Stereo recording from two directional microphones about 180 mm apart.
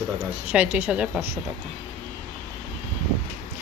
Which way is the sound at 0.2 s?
10° right (ahead or behind).